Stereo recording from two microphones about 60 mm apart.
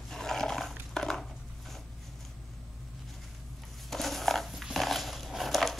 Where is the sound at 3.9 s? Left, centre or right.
Centre.